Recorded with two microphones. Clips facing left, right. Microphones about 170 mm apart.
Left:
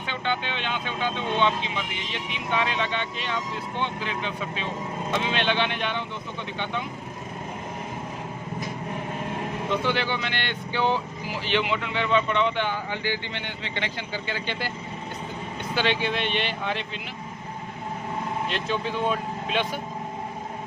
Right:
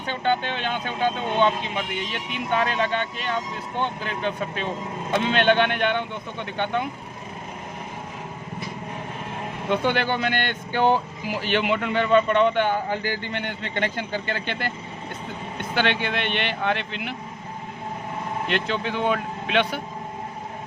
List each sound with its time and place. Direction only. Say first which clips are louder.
0.1 s speech: right 5 dB; 45° right (ahead or behind)
9.6 s speech: right 4 dB; 50° right (ahead or behind)
15.7 s speech: right 1 dB; 60° right (ahead or behind)
18.4 s speech: right 2 dB; 65° right (ahead or behind)